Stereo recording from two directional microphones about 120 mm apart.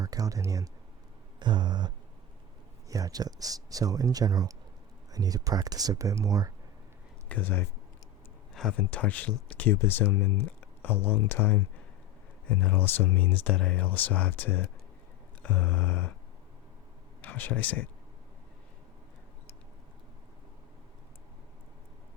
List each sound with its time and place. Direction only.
0.0 s speech: 30° right (ahead or behind)
2.9 s speech: 30° right (ahead or behind)
7.3 s speech: 15° left (ahead or behind)
17.2 s speech: 15° left (ahead or behind)